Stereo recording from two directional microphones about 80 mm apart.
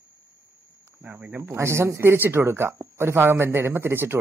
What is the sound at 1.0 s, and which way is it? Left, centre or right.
Speech, right.